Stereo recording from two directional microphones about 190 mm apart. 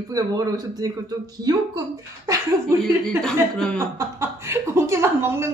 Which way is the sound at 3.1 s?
5° left (ahead or behind).